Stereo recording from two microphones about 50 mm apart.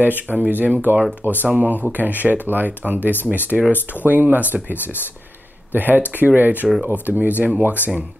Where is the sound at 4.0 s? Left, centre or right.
Right.